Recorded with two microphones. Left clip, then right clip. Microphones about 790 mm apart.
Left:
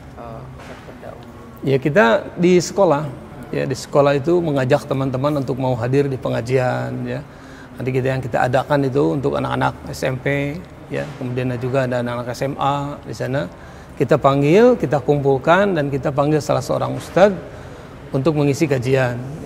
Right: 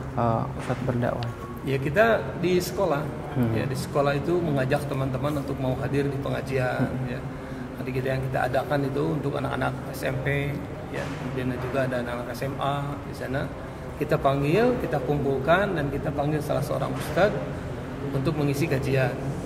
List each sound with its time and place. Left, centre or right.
1.7 s a man's voice: left